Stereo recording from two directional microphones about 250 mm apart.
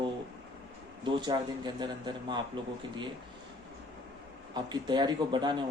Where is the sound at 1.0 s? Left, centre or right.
Centre.